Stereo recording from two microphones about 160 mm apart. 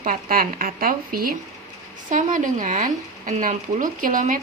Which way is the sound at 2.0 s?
55° right (ahead or behind).